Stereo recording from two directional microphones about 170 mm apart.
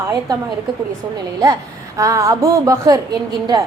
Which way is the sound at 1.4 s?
20° right (ahead or behind).